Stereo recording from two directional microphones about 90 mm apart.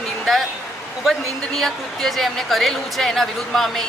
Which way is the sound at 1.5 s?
Centre (ahead or behind).